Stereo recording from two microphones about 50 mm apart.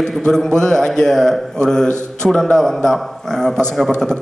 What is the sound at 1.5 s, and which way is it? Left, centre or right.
A man's voice, centre.